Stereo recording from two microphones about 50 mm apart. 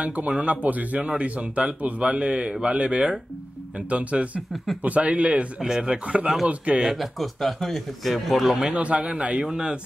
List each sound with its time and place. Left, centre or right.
0.0 s speech: right
5.6 s speech: centre
6.9 s a man's voice: centre
8.7 s speech: right